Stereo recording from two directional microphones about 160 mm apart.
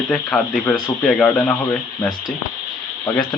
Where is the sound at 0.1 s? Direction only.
5° left (ahead or behind).